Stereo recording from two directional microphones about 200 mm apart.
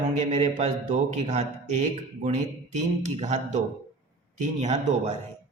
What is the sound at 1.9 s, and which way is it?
Speech, 35° right (ahead or behind).